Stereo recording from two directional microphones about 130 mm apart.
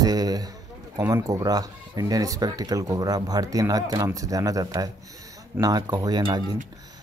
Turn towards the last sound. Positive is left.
turn(degrees=-35)  # may be behind; listen again after turning